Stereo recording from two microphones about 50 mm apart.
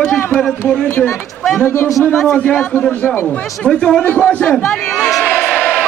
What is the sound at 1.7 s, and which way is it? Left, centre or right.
Speech, left.